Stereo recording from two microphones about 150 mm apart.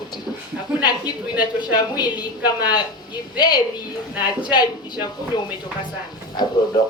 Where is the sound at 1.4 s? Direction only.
30° left (ahead or behind).